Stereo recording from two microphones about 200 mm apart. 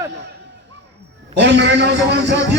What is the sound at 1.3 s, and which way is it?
Speech, 60° right (ahead or behind).